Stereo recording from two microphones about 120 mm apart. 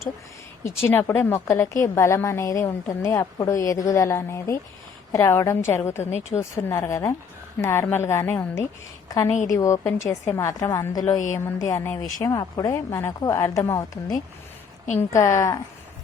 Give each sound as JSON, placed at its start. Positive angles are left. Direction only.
{"t": 0.6, "sound": "a woman's voice", "side_deg": 20}
{"t": 9.3, "sound": "a woman's voice", "side_deg": 90}
{"t": 9.6, "sound": "a woman's voice", "side_deg": 25}